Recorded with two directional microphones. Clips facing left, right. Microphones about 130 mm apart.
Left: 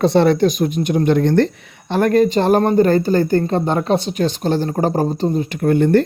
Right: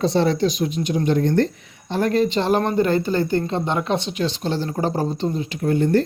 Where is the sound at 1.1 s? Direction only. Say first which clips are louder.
Left 4 dB; 75° left (ahead or behind).